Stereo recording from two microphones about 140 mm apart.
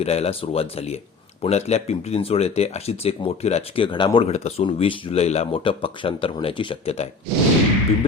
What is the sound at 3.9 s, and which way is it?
Speech, 35° left (ahead or behind).